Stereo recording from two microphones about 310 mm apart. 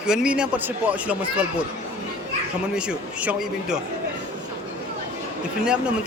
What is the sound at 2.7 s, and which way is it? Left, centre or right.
Speech, centre.